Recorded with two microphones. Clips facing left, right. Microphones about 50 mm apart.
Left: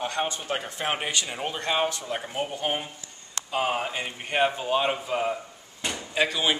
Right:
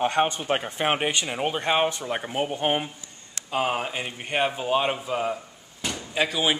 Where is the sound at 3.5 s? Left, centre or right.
Centre.